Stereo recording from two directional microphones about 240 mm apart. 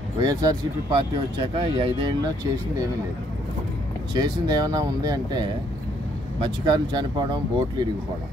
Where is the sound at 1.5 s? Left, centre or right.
Right.